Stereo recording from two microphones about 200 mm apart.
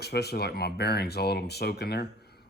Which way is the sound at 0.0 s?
55° left (ahead or behind).